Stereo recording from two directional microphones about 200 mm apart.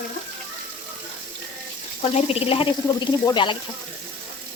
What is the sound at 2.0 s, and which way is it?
Speech, 30° left (ahead or behind).